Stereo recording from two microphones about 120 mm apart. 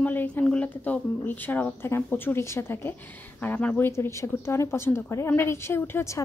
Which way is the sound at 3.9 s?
25° left (ahead or behind).